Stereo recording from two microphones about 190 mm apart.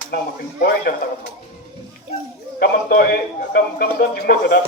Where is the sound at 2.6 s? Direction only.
50° left (ahead or behind).